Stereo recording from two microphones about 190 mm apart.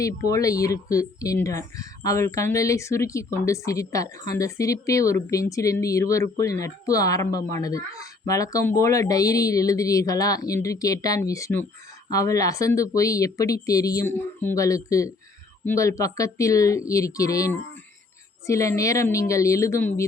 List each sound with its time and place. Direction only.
0.3 s speech: 15° left (ahead or behind)